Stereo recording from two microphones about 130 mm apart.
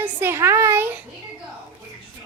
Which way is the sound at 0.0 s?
20° right (ahead or behind).